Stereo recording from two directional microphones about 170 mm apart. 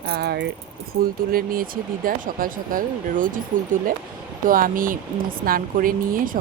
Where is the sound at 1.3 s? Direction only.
60° right (ahead or behind).